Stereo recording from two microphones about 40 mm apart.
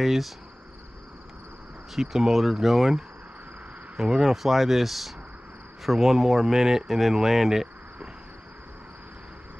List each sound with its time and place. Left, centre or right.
0.0 s speech: centre
2.0 s speech: centre
3.9 s speech: centre
4.2 s speech: centre